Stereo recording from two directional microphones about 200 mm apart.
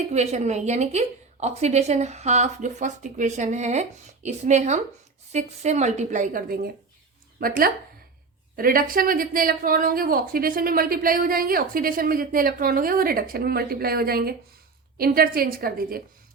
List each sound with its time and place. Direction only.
0.1 s a woman's voice: 35° right (ahead or behind)